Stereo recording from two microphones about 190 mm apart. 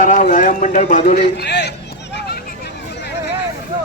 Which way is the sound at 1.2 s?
60° left (ahead or behind).